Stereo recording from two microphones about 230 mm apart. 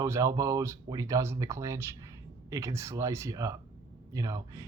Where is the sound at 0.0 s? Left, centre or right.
Centre.